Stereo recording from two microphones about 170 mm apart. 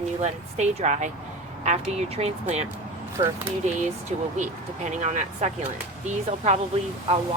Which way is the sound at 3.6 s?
45° right (ahead or behind).